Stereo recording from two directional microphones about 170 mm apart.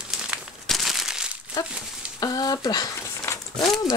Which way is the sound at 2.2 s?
20° left (ahead or behind).